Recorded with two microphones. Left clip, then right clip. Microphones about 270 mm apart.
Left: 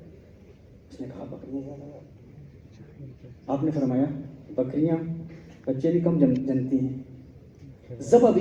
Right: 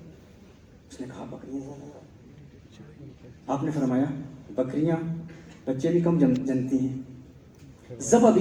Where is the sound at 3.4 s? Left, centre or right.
Right.